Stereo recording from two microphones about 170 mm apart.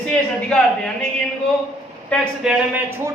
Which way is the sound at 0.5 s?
5° left (ahead or behind).